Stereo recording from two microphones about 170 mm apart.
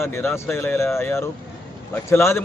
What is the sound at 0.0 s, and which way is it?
A man's voice, 15° left (ahead or behind).